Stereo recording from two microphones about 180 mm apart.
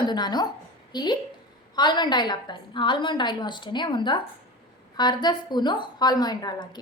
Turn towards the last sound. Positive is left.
turn(degrees=25)  # may be behind; listen again after turning